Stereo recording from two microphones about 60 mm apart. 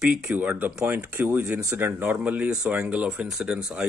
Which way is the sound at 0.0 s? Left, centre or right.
Centre.